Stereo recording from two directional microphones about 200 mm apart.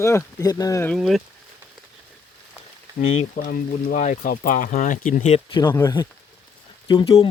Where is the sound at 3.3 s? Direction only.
45° left (ahead or behind).